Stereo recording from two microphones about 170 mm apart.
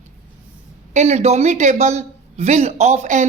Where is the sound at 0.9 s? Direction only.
40° right (ahead or behind).